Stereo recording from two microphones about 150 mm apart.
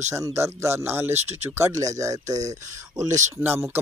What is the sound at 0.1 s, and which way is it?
Speech, 20° right (ahead or behind).